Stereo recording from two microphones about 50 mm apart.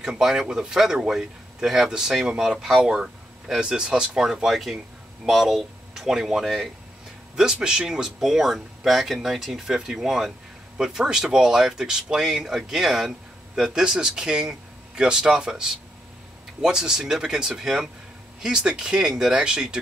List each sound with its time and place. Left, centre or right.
0.0 s speech: centre